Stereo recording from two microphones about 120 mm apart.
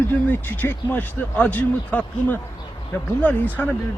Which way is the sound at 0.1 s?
15° left (ahead or behind).